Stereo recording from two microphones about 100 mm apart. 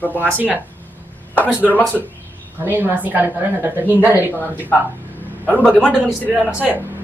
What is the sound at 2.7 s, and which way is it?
Speech, 20° right (ahead or behind).